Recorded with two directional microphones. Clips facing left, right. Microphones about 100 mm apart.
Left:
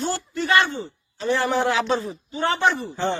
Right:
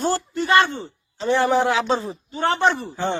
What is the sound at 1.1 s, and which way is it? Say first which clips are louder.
A man's voice: right 3 dB; 25° right (ahead or behind).